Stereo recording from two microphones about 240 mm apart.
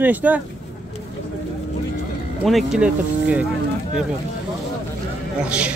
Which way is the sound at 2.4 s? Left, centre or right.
Centre.